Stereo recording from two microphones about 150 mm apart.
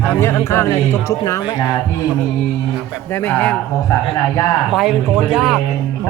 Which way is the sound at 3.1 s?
15° left (ahead or behind).